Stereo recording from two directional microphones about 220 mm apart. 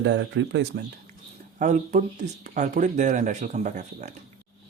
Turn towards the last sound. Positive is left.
turn(degrees=-35)  # may be behind; listen again after turning